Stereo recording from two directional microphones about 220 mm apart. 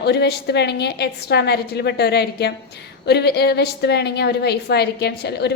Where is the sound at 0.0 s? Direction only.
50° left (ahead or behind).